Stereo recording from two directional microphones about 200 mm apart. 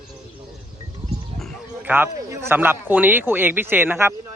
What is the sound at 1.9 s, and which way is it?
A man's voice, 10° right (ahead or behind).